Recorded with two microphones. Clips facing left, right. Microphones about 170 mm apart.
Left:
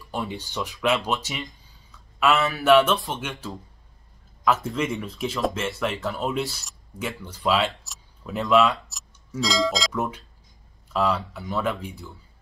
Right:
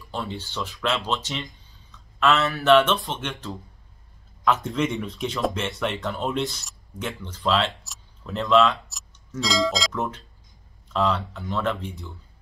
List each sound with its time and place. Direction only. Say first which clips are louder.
0.1 s speech: left 1 dB; 15° left (ahead or behind)